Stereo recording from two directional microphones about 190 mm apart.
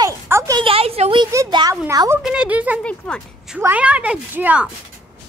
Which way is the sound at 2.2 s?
5° right (ahead or behind).